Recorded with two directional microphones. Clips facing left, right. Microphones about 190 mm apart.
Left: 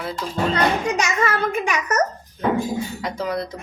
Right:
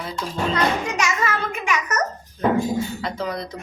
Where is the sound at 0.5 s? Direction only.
30° left (ahead or behind).